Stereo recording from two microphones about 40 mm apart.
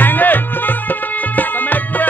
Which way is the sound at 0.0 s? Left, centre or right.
Left.